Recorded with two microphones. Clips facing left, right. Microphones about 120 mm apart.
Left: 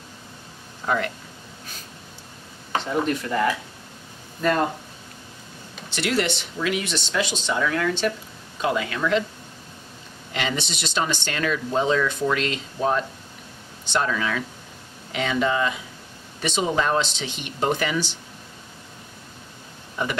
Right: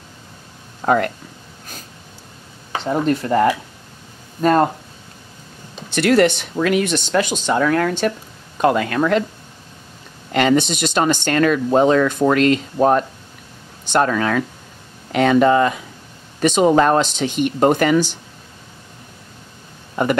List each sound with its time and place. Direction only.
0.8 s speech: 50° right (ahead or behind)
2.9 s speech: 40° right (ahead or behind)
5.9 s speech: 50° right (ahead or behind)
10.3 s speech: 50° right (ahead or behind)